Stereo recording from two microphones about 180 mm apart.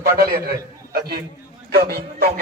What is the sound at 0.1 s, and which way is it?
Speech, 55° right (ahead or behind).